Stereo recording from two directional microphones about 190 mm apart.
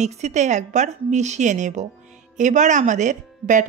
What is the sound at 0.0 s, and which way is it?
Speech, 35° right (ahead or behind).